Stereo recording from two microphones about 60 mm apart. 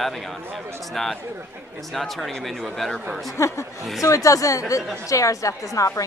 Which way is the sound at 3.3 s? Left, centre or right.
Left.